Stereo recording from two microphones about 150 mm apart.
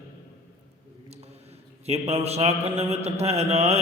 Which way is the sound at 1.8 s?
45° right (ahead or behind).